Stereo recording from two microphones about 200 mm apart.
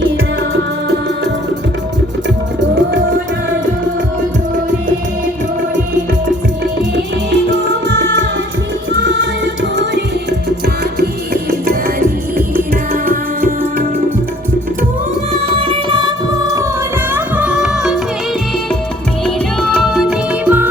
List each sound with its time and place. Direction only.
7.3 s music: 60° right (ahead or behind)
12.5 s music: 45° right (ahead or behind)
15.3 s music: 25° right (ahead or behind)
17.2 s music: 5° right (ahead or behind)
19.7 s music: centre (ahead or behind)